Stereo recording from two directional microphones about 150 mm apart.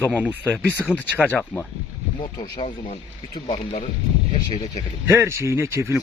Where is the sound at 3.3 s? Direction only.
35° left (ahead or behind).